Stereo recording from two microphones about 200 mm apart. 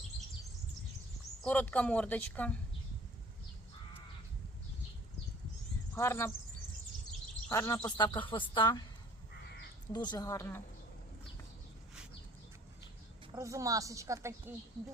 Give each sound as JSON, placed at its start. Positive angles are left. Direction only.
{"t": 1.5, "sound": "speech", "side_deg": 5}
{"t": 5.9, "sound": "speech", "side_deg": 10}
{"t": 7.4, "sound": "speech", "side_deg": 10}
{"t": 9.9, "sound": "speech", "side_deg": 20}
{"t": 13.3, "sound": "a woman's voice", "side_deg": -15}